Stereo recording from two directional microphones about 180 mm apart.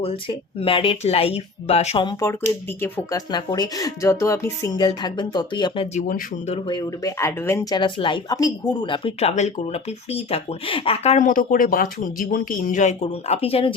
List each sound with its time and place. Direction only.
0.0 s speech: 30° left (ahead or behind)
2.8 s speech: 20° left (ahead or behind); by 6.2 s 45° left (ahead or behind)
6.5 s speech: 25° left (ahead or behind)